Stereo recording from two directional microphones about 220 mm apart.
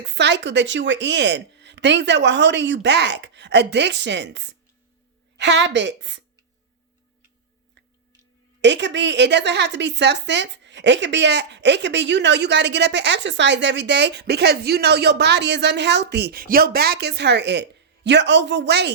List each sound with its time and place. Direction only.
0.0 s a woman's voice: 50° right (ahead or behind)
8.6 s a woman's voice: 55° right (ahead or behind)